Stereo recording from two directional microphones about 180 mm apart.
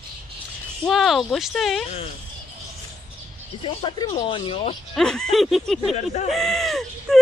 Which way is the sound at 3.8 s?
35° left (ahead or behind).